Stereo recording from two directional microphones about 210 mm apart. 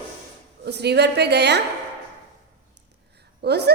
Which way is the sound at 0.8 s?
50° right (ahead or behind).